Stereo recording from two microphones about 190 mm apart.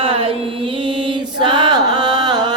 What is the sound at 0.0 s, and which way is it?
Music, 30° right (ahead or behind).